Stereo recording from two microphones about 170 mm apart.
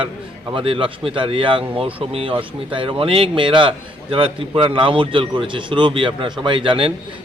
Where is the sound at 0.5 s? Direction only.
30° right (ahead or behind).